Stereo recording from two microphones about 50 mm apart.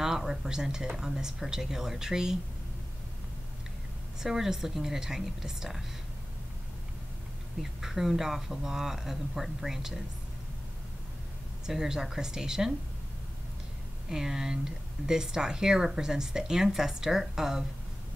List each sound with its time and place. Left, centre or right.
0.0 s speech: centre
4.2 s speech: centre
7.6 s speech: centre
11.6 s speech: centre
14.0 s speech: centre